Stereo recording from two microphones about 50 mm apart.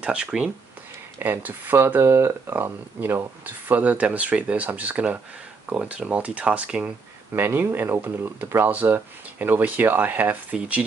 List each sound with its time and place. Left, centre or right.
0.0 s speech: right
1.2 s speech: right
2.0 s speech: right
2.5 s speech: right
3.4 s speech: right
7.3 s speech: right
9.4 s speech: right